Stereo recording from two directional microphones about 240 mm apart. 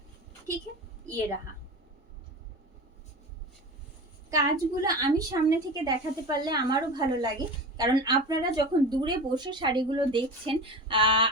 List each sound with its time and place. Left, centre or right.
4.3 s a woman's voice: centre